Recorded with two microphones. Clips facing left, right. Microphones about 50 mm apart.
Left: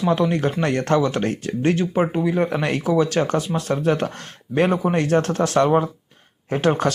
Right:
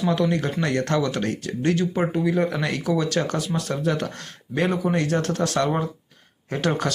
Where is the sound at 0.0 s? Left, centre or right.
Left.